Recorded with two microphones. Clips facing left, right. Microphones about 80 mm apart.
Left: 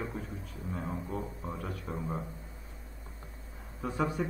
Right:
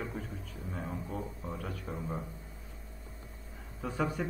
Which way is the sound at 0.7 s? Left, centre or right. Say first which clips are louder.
Left 2 dB; left.